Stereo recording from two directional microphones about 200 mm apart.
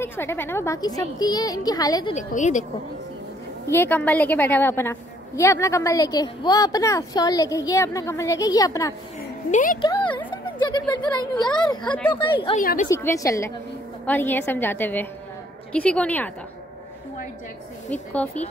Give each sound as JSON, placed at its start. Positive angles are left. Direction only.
{"t": 0.0, "sound": "a woman's voice", "side_deg": 10}
{"t": 2.1, "sound": "a woman's voice", "side_deg": 40}
{"t": 3.7, "sound": "a woman's voice", "side_deg": 10}
{"t": 9.5, "sound": "speech", "side_deg": 40}
{"t": 10.1, "sound": "a woman's voice", "side_deg": 20}
{"t": 12.5, "sound": "a woman's voice", "side_deg": 40}
{"t": 12.9, "sound": "a woman's voice", "side_deg": 15}
{"t": 17.8, "sound": "a woman's voice", "side_deg": 5}